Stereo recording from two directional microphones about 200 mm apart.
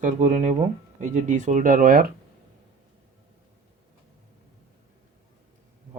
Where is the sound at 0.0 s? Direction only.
40° right (ahead or behind).